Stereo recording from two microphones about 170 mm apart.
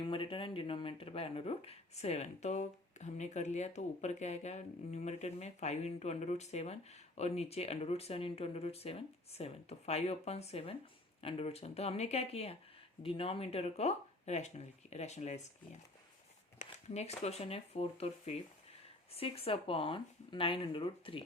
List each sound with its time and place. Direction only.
0.0 s speech: 30° left (ahead or behind)
16.6 s speech: 40° left (ahead or behind)